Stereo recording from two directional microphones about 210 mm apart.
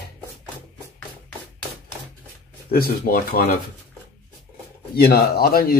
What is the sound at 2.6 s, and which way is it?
Speech, 45° left (ahead or behind).